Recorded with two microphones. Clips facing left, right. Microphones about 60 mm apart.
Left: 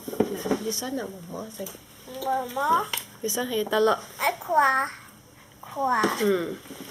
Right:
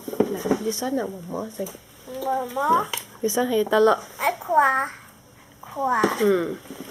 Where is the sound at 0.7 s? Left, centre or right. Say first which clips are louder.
Right 6 dB; centre.